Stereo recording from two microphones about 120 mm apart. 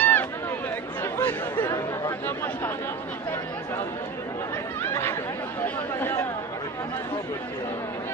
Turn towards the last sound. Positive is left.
turn(degrees=15)  # may be behind; listen again after turning